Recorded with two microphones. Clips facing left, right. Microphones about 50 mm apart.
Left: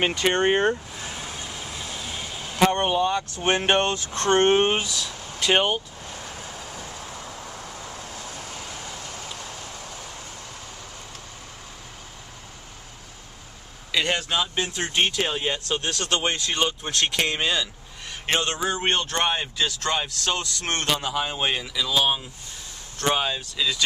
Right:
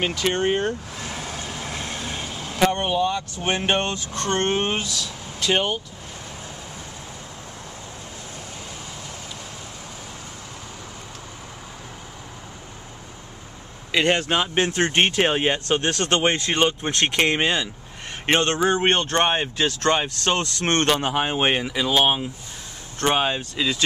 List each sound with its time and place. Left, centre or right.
0.0 s speech: centre
1.6 s vehicle: right
2.6 s speech: centre
3.3 s speech: centre
3.8 s speech: centre
13.9 s speech: right
19.5 s speech: right